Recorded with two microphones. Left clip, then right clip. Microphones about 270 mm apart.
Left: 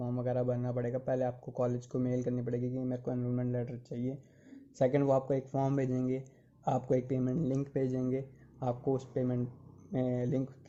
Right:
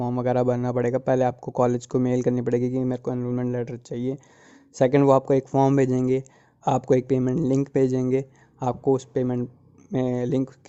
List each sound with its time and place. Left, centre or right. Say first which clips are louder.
0.0 s speech: right 11 dB; right